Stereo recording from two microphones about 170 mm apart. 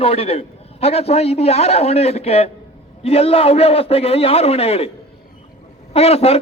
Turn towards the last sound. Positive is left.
turn(degrees=35)  # may be behind; listen again after turning